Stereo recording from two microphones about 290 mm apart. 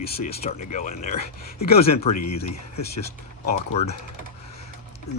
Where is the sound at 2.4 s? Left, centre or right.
Left.